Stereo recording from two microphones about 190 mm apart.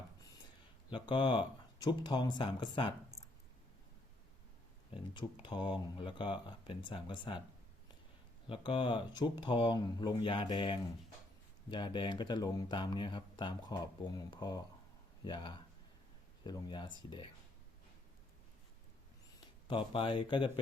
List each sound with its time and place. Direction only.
0.9 s speech: 25° left (ahead or behind)
5.1 s speech: 25° left (ahead or behind)
8.4 s speech: 25° left (ahead or behind)
19.6 s speech: 25° left (ahead or behind)